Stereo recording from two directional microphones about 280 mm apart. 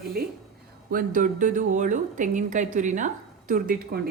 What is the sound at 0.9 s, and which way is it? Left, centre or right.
A woman's voice, right.